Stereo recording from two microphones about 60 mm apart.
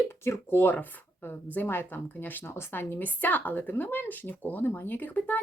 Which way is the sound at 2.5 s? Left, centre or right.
Left.